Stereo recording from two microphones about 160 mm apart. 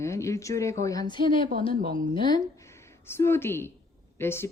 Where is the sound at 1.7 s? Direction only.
65° right (ahead or behind).